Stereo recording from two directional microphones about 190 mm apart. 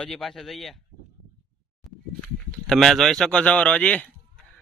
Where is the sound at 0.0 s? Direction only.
Centre (ahead or behind).